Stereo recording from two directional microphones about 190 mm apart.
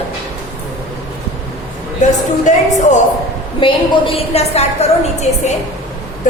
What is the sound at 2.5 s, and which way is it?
Speech, 40° left (ahead or behind).